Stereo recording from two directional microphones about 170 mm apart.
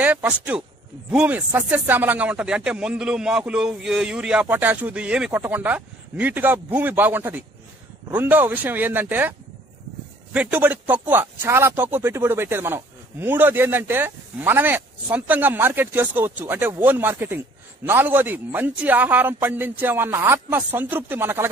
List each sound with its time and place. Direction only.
0.0 s speech: 10° right (ahead or behind)
10.3 s speech: 10° right (ahead or behind)